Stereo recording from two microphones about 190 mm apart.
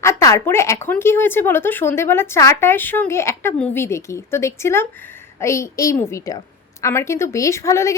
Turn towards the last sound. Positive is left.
turn(degrees=15)  # may be behind; listen again after turning